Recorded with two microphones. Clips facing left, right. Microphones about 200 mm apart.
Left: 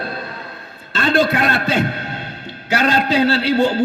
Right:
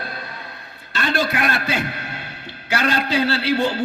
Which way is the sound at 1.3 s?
25° left (ahead or behind).